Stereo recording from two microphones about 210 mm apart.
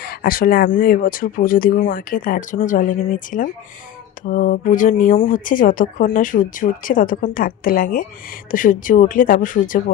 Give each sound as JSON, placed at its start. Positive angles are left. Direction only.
{"t": 0.0, "sound": "speech", "side_deg": 45}